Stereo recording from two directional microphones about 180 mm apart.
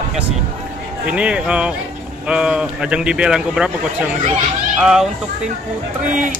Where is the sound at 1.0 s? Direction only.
5° right (ahead or behind).